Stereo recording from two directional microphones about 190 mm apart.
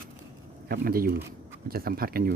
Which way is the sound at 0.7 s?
50° right (ahead or behind).